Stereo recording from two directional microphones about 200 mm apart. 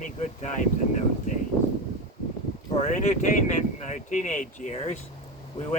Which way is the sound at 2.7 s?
35° left (ahead or behind).